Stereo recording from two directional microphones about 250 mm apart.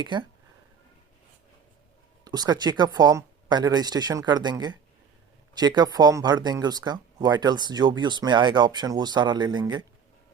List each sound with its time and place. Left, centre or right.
0.0 s speech: centre
2.2 s speech: centre